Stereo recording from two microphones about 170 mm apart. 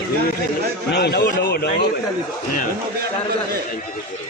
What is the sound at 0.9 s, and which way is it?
Speech, 75° left (ahead or behind).